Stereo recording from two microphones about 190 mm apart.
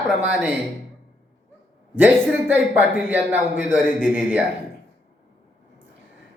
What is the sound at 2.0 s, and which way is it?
Speech, 10° right (ahead or behind).